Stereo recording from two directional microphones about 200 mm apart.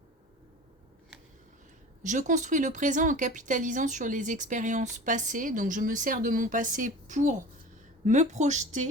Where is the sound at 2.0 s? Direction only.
40° right (ahead or behind).